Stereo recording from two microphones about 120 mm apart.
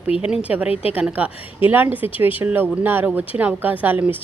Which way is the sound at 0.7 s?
55° left (ahead or behind).